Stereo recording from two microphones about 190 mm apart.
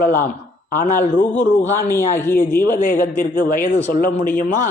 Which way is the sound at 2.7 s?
45° left (ahead or behind).